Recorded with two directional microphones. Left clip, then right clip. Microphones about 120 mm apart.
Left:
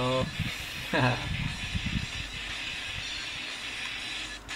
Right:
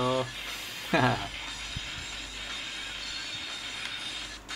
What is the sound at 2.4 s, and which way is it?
Train, 40° right (ahead or behind).